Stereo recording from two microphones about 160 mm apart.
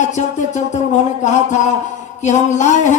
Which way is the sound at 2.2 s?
50° left (ahead or behind).